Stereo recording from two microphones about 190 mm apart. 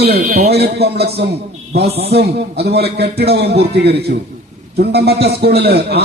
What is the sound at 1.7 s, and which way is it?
Speech, 35° right (ahead or behind).